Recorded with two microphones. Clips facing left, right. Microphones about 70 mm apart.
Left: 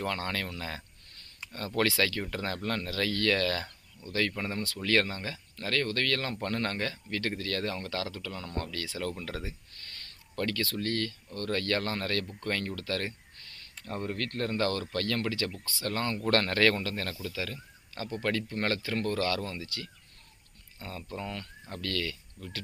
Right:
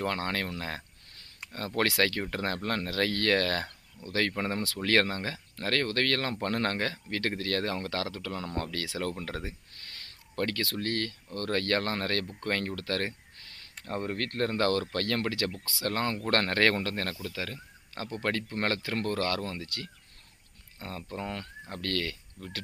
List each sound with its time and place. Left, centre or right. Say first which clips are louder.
0.0 s speech: right 2 dB; right
4.8 s speech: right 2 dB; right
9.0 s speech: right 1 dB; right
17.2 s speech: even; right
20.7 s speech: right 1 dB; right